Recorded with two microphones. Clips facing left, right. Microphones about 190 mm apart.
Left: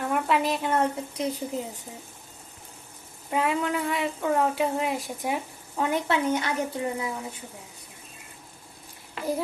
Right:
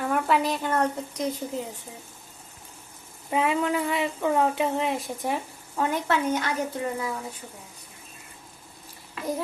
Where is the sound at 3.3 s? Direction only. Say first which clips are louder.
Right 2 dB; centre (ahead or behind).